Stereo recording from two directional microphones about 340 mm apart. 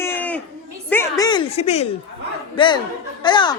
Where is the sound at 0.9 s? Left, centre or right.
Centre.